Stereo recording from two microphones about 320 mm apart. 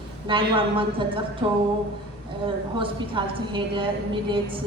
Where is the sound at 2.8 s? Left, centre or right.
Centre.